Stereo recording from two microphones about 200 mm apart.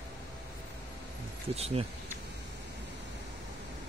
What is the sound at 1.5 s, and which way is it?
Speech, 30° right (ahead or behind).